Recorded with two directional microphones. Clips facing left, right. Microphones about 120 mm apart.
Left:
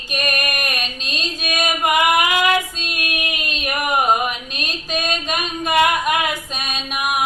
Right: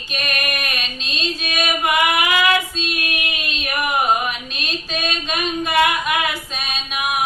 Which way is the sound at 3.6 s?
15° left (ahead or behind).